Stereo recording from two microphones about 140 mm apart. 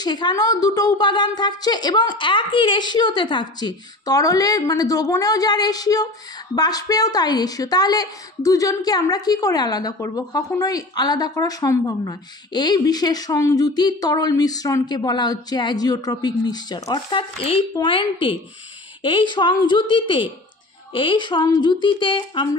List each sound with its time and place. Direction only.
0.0 s speech: 30° left (ahead or behind)
19.0 s speech: 35° left (ahead or behind)